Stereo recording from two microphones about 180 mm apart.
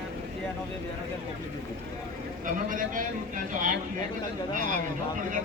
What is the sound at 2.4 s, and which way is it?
A man's voice, 45° right (ahead or behind).